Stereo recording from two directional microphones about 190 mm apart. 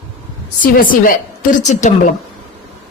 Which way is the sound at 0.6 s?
45° left (ahead or behind).